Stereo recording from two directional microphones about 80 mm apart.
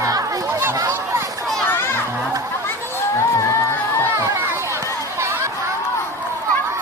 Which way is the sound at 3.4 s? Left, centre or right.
Left.